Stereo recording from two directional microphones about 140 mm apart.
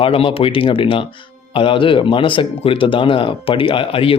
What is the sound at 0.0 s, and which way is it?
Speech, 40° left (ahead or behind).